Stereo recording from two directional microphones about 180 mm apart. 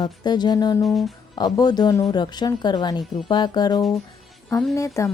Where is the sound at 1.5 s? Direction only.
25° left (ahead or behind).